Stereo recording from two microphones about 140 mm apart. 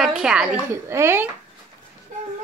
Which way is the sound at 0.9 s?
15° right (ahead or behind).